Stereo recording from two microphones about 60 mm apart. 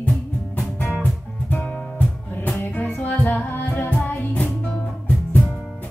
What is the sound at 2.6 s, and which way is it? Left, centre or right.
Music, left.